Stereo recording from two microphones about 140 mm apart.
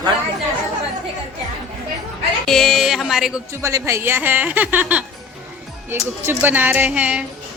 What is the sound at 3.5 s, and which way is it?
A woman's voice, 20° right (ahead or behind).